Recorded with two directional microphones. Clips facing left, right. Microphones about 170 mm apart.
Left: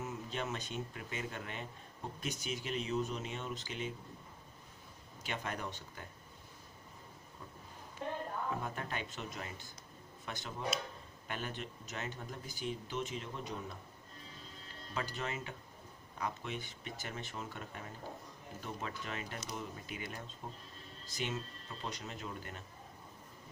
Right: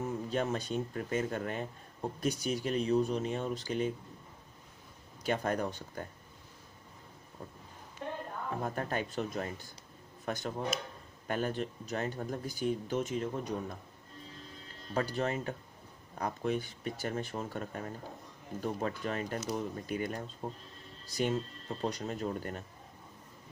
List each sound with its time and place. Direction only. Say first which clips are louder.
0.0 s speech: right 7 dB; 35° right (ahead or behind)
5.2 s speech: right 9 dB; 40° right (ahead or behind)
8.6 s speech: right 7 dB; 45° right (ahead or behind)
14.9 s speech: right 8 dB; 40° right (ahead or behind)